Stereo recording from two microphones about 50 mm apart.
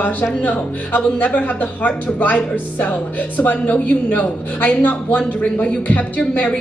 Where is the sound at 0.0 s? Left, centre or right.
Left.